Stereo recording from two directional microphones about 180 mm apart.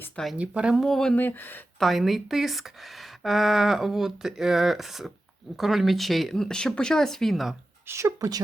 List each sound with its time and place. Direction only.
0.0 s speech: centre (ahead or behind)
1.9 s speech: centre (ahead or behind)
7.9 s speech: 15° right (ahead or behind)